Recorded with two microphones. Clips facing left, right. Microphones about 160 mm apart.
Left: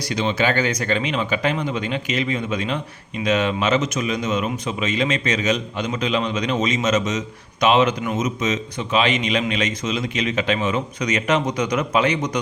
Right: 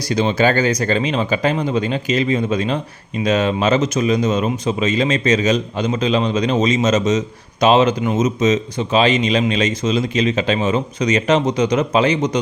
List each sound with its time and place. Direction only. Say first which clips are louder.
0.1 s speech: right 5 dB; 40° right (ahead or behind)